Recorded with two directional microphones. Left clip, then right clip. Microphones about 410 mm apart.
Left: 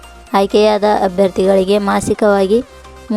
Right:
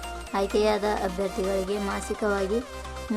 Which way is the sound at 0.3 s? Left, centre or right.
Centre.